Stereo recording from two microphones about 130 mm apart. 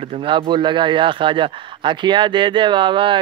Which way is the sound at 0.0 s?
45° right (ahead or behind).